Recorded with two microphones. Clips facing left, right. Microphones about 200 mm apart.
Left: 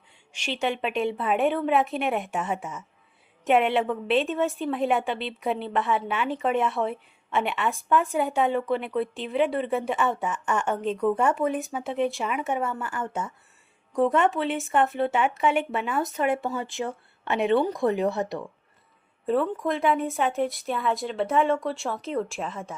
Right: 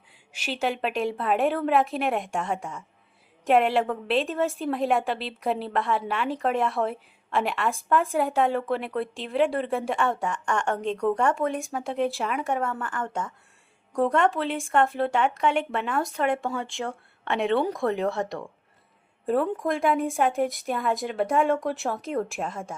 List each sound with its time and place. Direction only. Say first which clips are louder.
0.3 s a woman's voice: even; 5° right (ahead or behind)
19.9 s a woman's voice: even; centre (ahead or behind)
20.7 s speech: even; 45° right (ahead or behind)